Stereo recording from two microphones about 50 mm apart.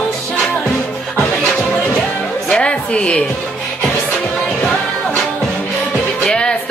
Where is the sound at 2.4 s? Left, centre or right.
Centre.